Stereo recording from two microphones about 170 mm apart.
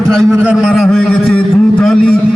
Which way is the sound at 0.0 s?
Centre (ahead or behind).